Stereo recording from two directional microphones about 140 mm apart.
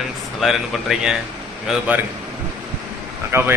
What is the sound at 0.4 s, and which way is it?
Speech, centre (ahead or behind).